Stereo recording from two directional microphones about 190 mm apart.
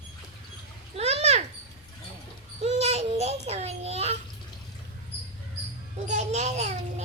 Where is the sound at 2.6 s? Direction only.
35° right (ahead or behind).